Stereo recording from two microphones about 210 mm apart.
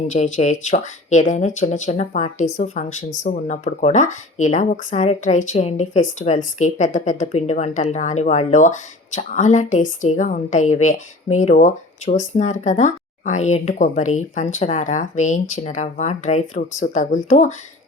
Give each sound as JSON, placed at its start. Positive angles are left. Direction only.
{"t": 0.1, "sound": "a woman's voice", "side_deg": 35}